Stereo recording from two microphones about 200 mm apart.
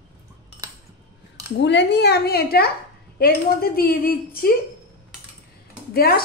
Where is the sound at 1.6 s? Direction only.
60° left (ahead or behind).